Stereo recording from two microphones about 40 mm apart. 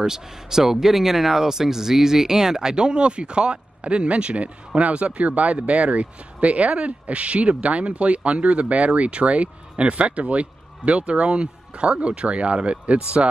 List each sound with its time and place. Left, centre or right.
0.0 s speech: centre; by 13.0 s right